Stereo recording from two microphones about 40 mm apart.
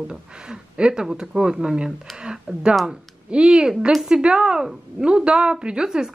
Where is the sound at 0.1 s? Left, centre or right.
Right.